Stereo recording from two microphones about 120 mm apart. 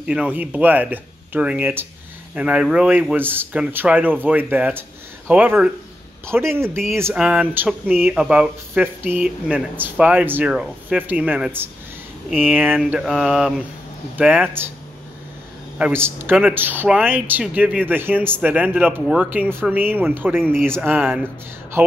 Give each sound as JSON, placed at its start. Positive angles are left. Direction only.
{"t": 0.0, "sound": "speech", "side_deg": -10}
{"t": 7.2, "sound": "speech", "side_deg": -10}
{"t": 13.0, "sound": "a sound", "side_deg": -5}
{"t": 14.1, "sound": "speech", "side_deg": -15}
{"t": 15.8, "sound": "speech", "side_deg": -20}